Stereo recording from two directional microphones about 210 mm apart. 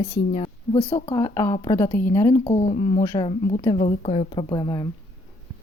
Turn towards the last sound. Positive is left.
turn(degrees=20)  # may be behind; listen again after turning